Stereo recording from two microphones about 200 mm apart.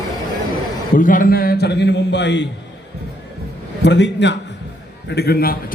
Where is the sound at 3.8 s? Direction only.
60° left (ahead or behind).